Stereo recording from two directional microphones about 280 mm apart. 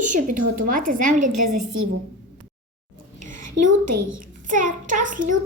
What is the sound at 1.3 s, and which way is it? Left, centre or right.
Speech, right.